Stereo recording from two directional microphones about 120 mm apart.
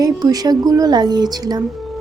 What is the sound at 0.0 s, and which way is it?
Speech, 30° right (ahead or behind).